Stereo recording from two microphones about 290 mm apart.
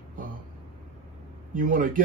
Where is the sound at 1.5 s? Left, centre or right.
Right.